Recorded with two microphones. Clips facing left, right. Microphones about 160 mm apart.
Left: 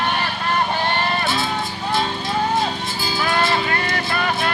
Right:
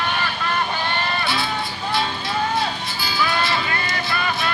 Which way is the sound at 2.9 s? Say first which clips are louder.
Left 1 dB; 45° left (ahead or behind).